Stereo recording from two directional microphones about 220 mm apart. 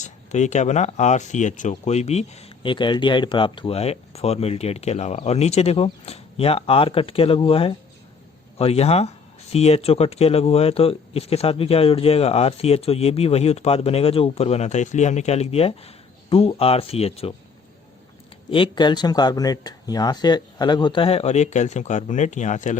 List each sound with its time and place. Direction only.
0.0 s speech: 30° left (ahead or behind)
18.5 s speech: 20° left (ahead or behind)